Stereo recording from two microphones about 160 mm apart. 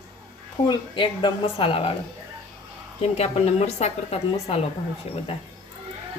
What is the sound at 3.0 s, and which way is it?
A woman's voice, 40° left (ahead or behind).